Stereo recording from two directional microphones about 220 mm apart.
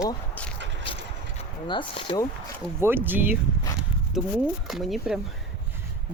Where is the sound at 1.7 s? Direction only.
25° left (ahead or behind).